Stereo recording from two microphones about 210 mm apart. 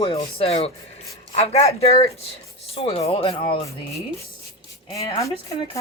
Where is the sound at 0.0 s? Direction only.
30° left (ahead or behind).